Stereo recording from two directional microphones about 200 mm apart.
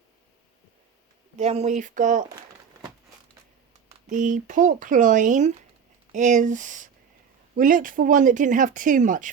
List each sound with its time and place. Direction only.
1.4 s speech: 30° right (ahead or behind)
4.1 s speech: 40° right (ahead or behind)